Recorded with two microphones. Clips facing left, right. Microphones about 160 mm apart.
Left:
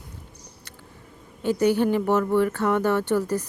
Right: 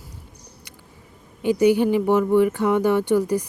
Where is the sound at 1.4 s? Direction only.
15° right (ahead or behind).